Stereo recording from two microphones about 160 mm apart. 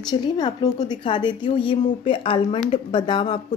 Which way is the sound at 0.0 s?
25° left (ahead or behind).